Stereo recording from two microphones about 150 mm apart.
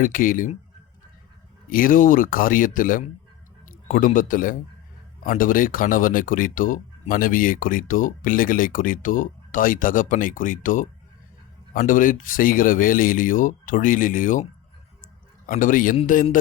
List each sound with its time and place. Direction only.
0.0 s speech: 65° left (ahead or behind)
1.7 s a man's voice: 70° left (ahead or behind)
15.0 s a sound: 65° left (ahead or behind)